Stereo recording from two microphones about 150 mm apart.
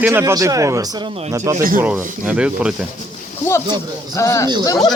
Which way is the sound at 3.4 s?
15° left (ahead or behind).